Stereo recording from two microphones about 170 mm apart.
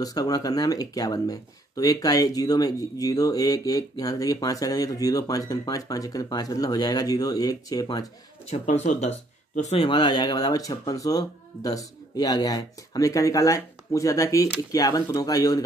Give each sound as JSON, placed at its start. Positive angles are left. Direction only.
{"t": 0.0, "sound": "speech", "side_deg": 20}
{"t": 8.5, "sound": "speech", "side_deg": 40}